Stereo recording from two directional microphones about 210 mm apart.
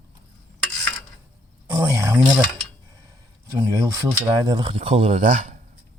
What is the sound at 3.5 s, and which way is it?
Speech, 15° right (ahead or behind).